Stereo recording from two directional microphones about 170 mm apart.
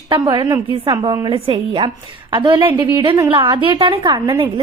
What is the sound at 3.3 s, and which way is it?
A woman's voice, 30° right (ahead or behind).